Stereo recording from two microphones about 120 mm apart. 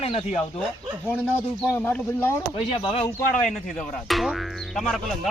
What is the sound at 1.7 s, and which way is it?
Speech, 15° left (ahead or behind).